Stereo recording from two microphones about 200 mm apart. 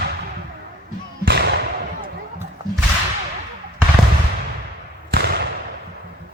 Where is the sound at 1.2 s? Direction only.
55° right (ahead or behind).